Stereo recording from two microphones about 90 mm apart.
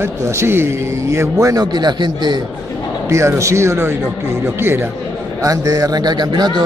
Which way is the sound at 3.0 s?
30° right (ahead or behind).